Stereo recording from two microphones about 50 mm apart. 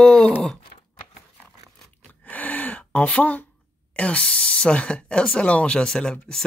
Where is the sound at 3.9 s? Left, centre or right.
Left.